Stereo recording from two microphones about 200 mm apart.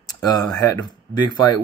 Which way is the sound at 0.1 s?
20° left (ahead or behind).